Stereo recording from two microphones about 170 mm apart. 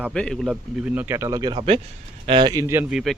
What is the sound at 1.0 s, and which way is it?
Speech, 15° right (ahead or behind).